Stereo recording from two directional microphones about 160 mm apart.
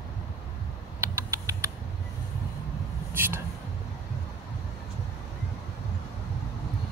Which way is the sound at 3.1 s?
15° right (ahead or behind).